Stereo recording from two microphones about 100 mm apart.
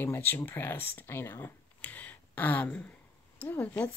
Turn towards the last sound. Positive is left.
turn(degrees=15)  # may be behind; listen again after turning